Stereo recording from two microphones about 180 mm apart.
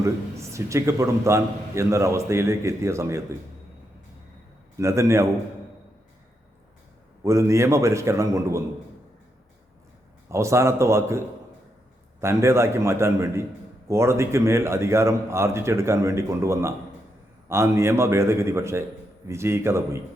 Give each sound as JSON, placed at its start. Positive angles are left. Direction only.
{"t": 0.0, "sound": "a man's voice", "side_deg": -15}
{"t": 4.8, "sound": "a man's voice", "side_deg": -15}
{"t": 7.2, "sound": "a man's voice", "side_deg": -15}
{"t": 10.2, "sound": "a man's voice", "side_deg": -15}
{"t": 12.2, "sound": "a man's voice", "side_deg": -15}